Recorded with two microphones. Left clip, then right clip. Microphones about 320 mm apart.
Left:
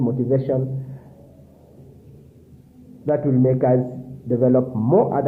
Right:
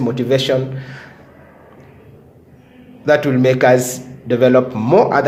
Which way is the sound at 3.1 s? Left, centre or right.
Centre.